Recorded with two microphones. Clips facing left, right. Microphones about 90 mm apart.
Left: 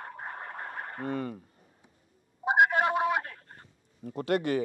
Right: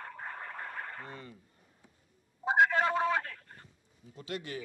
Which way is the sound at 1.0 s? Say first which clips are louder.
Left 13 dB; 70° left (ahead or behind).